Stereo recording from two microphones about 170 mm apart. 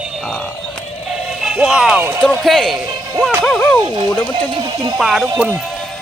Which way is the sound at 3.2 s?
10° right (ahead or behind).